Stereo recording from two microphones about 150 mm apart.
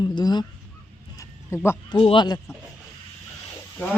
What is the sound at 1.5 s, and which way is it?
Speech, 15° left (ahead or behind).